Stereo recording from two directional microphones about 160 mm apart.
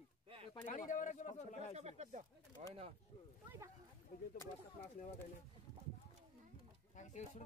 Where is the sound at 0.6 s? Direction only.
55° left (ahead or behind).